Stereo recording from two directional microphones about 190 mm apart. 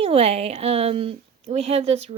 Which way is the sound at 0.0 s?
30° right (ahead or behind).